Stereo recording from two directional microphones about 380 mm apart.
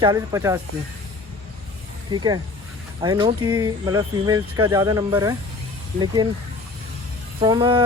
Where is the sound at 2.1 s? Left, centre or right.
Centre.